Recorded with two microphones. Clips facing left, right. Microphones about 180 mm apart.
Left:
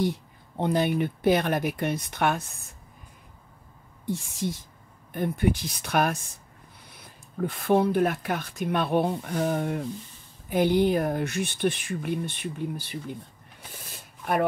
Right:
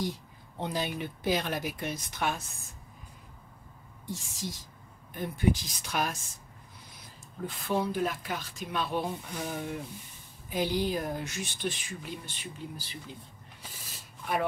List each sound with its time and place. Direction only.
0.0 s speech: 60° left (ahead or behind)
4.0 s speech: 60° left (ahead or behind)